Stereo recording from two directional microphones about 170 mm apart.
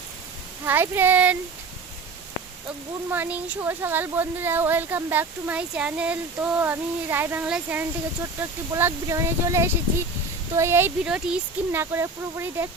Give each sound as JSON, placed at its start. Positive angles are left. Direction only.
{"t": 0.6, "sound": "speech", "side_deg": -10}
{"t": 3.1, "sound": "speech", "side_deg": -10}